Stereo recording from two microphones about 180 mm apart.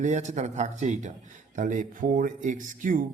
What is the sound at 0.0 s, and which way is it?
Speech, 40° right (ahead or behind).